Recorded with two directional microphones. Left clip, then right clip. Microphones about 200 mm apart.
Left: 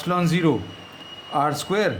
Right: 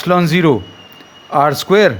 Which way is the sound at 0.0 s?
40° right (ahead or behind).